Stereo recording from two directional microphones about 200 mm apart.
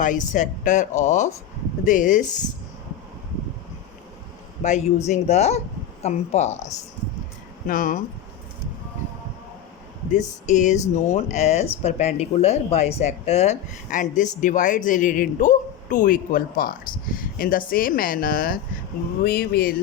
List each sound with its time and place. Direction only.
0.0 s speech: 40° left (ahead or behind)
4.6 s speech: 35° left (ahead or behind)
7.7 s speech: 40° left (ahead or behind)
10.4 s speech: 35° left (ahead or behind)